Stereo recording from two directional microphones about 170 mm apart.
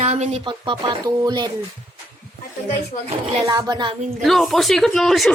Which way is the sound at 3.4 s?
25° right (ahead or behind).